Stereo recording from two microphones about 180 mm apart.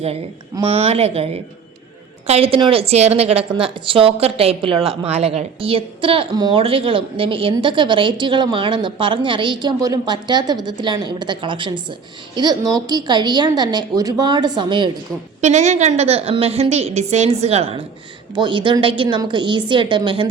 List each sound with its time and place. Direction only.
0.5 s a woman's voice: 30° right (ahead or behind)
15.4 s a woman's voice: 40° right (ahead or behind)